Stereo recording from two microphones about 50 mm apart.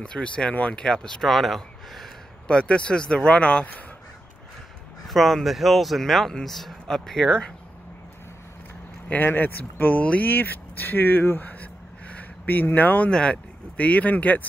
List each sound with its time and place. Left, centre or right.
0.0 s speech: centre
0.7 s speech: centre
2.4 s speech: left
5.0 s speech: centre
9.2 s speech: left
13.1 s speech: left